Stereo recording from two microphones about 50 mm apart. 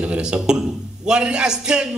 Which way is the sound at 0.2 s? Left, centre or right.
Centre.